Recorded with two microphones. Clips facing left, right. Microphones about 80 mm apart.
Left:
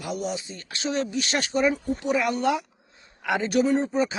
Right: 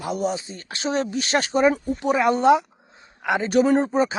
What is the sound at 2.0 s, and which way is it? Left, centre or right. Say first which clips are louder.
A man's voice: right 6 dB; right.